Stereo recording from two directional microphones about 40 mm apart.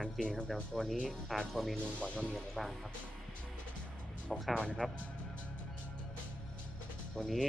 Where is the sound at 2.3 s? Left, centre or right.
Centre.